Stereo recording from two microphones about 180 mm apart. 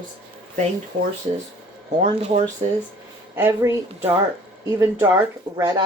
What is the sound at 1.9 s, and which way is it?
Speech, 35° right (ahead or behind).